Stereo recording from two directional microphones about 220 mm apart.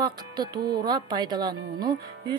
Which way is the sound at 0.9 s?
20° right (ahead or behind).